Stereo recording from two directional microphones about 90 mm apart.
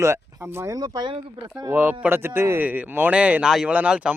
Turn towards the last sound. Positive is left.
turn(degrees=-15)  # may be behind; listen again after turning